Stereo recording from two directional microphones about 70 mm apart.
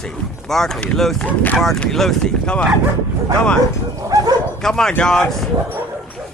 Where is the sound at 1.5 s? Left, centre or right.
Centre.